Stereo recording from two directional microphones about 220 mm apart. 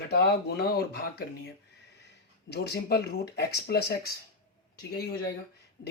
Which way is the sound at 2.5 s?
50° left (ahead or behind).